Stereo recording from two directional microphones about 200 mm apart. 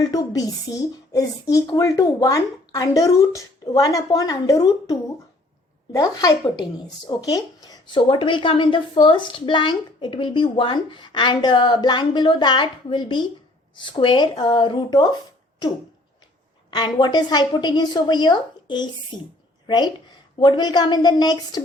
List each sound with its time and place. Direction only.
0.0 s a woman's voice: 20° left (ahead or behind)
16.7 s speech: 20° left (ahead or behind)